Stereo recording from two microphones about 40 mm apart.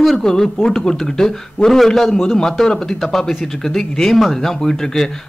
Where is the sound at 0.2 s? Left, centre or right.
Centre.